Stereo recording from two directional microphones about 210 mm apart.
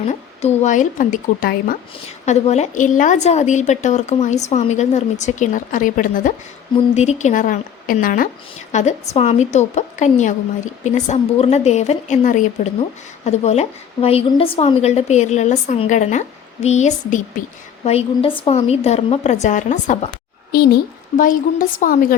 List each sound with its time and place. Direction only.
0.1 s a woman's voice: 35° left (ahead or behind)
20.5 s a woman's voice: 50° left (ahead or behind)